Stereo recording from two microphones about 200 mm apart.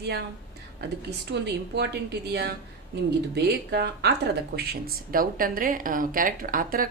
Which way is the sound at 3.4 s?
55° right (ahead or behind).